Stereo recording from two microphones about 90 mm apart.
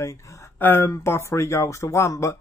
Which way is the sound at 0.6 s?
25° left (ahead or behind).